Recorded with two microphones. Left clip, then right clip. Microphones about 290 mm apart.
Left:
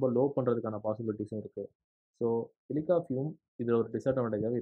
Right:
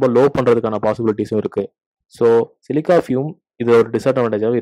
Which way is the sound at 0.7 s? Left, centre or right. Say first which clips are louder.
Right 17 dB; right.